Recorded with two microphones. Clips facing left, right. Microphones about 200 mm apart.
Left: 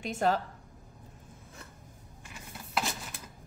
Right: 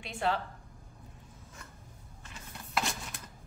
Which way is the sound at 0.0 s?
45° left (ahead or behind).